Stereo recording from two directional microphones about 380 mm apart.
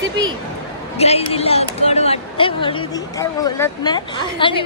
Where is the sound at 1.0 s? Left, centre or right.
Centre.